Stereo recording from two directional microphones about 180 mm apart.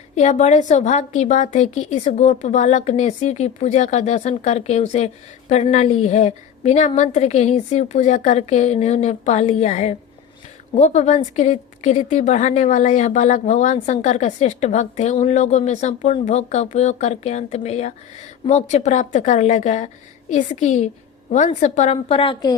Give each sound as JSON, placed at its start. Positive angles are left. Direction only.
{"t": 0.2, "sound": "a woman's voice", "side_deg": 40}